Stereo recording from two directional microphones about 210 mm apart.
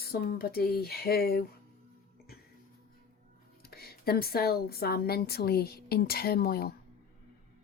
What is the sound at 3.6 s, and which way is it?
Speech, 45° left (ahead or behind).